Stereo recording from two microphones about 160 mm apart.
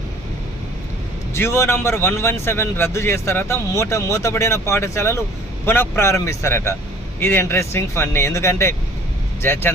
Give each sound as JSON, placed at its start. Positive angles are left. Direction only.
{"t": 1.3, "sound": "speech", "side_deg": 15}